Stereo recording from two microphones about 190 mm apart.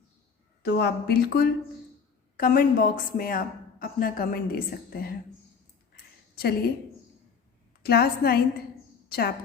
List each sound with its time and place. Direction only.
0.6 s a woman's voice: 60° left (ahead or behind)
6.3 s a woman's voice: 55° left (ahead or behind)
7.8 s a woman's voice: 55° left (ahead or behind)